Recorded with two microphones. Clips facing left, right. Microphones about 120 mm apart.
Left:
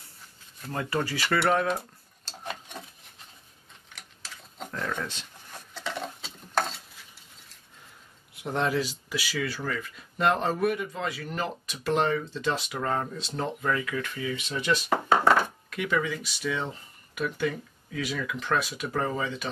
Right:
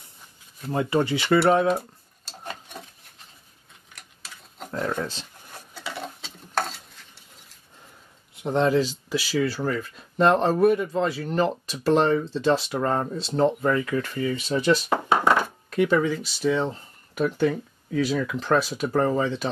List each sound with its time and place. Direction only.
0.7 s speech: 20° right (ahead or behind)
1.7 s a sound: 5° right (ahead or behind)
3.9 s tick-tock: centre (ahead or behind)
4.6 s speech: 30° right (ahead or behind)
5.8 s stir: 10° right (ahead or behind)
6.2 s a sound: centre (ahead or behind)
8.4 s speech: 25° right (ahead or behind)